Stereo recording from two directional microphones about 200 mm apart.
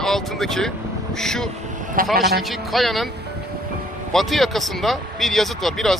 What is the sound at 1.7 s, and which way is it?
Vehicle, 40° right (ahead or behind).